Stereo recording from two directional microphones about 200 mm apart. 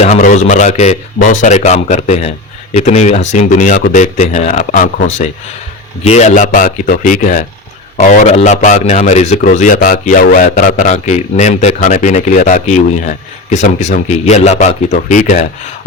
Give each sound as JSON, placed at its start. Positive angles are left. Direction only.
{"t": 0.0, "sound": "a man's voice", "side_deg": 35}